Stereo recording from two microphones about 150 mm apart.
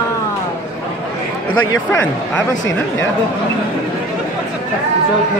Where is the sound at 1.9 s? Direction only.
20° left (ahead or behind).